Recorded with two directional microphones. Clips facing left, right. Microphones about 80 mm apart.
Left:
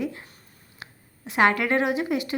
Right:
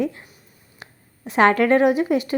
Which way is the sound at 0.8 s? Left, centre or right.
Right.